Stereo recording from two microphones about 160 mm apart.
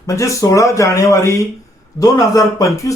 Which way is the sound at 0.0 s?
20° left (ahead or behind).